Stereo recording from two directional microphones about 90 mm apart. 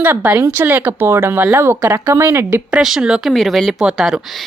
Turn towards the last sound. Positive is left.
turn(degrees=-5)  # may be behind; listen again after turning